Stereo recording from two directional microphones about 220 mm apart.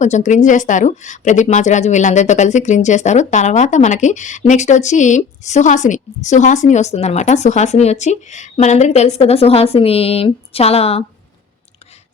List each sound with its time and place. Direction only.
0.0 s speech: 35° left (ahead or behind)